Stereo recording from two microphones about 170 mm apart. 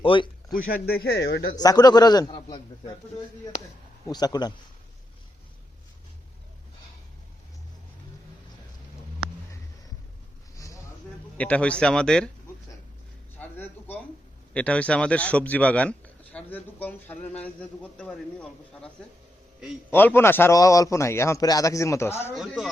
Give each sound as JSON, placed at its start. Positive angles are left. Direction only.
{"t": 0.0, "sound": "speech", "side_deg": 30}
{"t": 0.5, "sound": "speech", "side_deg": 55}
{"t": 1.5, "sound": "a man's voice", "side_deg": 25}
{"t": 4.1, "sound": "a man's voice", "side_deg": 25}
{"t": 11.3, "sound": "speech", "side_deg": 5}
{"t": 13.6, "sound": "a sound", "side_deg": 10}
{"t": 14.5, "sound": "a man's voice", "side_deg": 10}
{"t": 19.9, "sound": "a man's voice", "side_deg": 10}
{"t": 22.4, "sound": "speech", "side_deg": 0}